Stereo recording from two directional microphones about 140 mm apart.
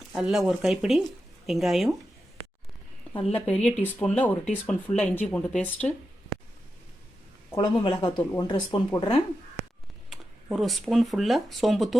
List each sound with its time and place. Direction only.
0.1 s speech: centre (ahead or behind)
3.2 s speech: 40° left (ahead or behind)
3.4 s speech: 5° left (ahead or behind)
7.5 s speech: 35° left (ahead or behind)
10.1 s speech: centre (ahead or behind)